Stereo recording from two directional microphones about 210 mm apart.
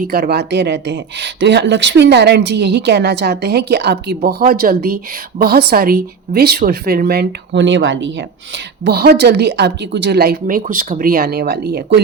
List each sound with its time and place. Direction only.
0.0 s speech: 45° right (ahead or behind)